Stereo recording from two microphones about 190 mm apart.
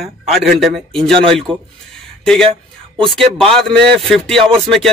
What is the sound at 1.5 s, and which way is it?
Speech, 25° right (ahead or behind).